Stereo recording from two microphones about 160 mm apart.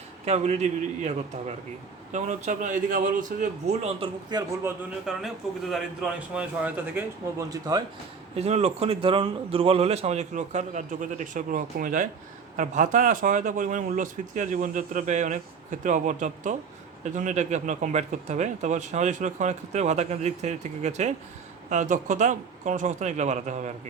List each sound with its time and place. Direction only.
0.3 s speech: 45° right (ahead or behind)
4.3 s a man's voice: 25° right (ahead or behind)
5.1 s a man's voice: 5° right (ahead or behind); by 7.9 s 25° right (ahead or behind)
8.4 s a man's voice: 40° right (ahead or behind)